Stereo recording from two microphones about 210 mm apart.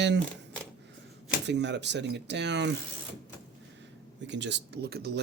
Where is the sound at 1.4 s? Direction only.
55° right (ahead or behind).